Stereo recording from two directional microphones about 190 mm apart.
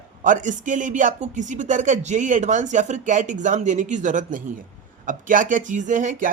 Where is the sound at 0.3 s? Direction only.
40° right (ahead or behind).